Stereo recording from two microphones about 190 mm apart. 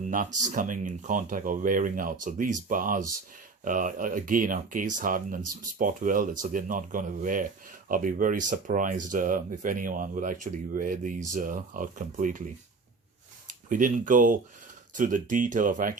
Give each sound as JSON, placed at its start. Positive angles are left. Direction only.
{"t": 0.1, "sound": "speech", "side_deg": -45}
{"t": 13.5, "sound": "speech", "side_deg": -45}